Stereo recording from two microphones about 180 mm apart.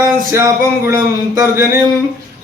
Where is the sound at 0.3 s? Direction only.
15° right (ahead or behind).